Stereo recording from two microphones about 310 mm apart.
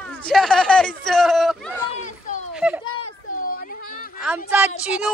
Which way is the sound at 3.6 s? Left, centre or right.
Left.